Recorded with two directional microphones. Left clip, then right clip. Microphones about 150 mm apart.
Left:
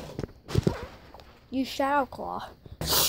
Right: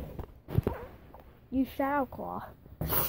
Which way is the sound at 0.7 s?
5° right (ahead or behind).